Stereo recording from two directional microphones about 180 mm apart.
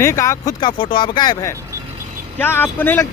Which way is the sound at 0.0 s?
15° left (ahead or behind).